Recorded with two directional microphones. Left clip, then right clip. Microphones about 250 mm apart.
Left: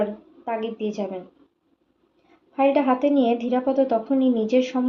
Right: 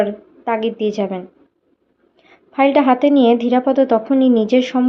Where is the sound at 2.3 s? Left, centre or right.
Right.